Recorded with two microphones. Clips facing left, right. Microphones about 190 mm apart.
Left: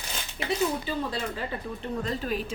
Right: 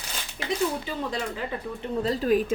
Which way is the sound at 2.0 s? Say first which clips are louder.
Right 9 dB; 40° right (ahead or behind).